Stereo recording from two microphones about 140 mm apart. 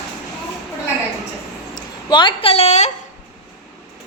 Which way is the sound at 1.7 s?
35° left (ahead or behind).